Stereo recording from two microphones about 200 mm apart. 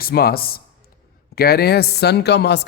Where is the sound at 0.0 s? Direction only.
50° left (ahead or behind).